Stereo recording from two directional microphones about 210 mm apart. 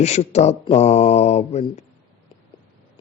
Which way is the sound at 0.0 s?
30° left (ahead or behind).